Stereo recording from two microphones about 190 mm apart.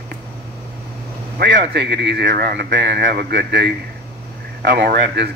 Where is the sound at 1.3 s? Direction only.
65° right (ahead or behind).